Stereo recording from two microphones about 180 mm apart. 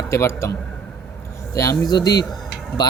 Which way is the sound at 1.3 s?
15° left (ahead or behind).